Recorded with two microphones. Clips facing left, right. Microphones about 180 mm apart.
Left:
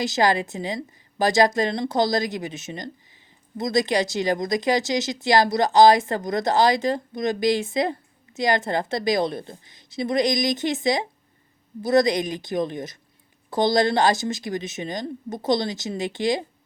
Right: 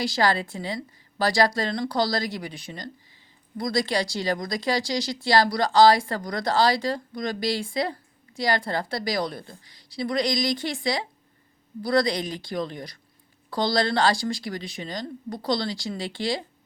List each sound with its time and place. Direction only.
0.0 s speech: 20° left (ahead or behind)